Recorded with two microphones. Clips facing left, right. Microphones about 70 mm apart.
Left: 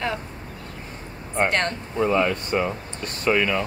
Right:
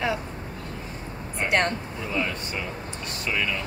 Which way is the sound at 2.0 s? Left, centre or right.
Left.